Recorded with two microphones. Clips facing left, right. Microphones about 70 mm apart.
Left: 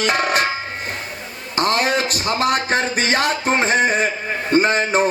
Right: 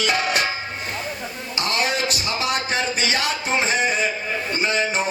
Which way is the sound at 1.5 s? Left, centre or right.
Left.